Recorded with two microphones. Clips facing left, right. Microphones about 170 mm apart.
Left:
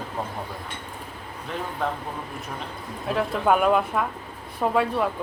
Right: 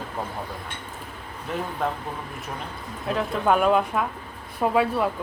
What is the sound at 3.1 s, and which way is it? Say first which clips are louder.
Speech: left 1 dB; centre (ahead or behind).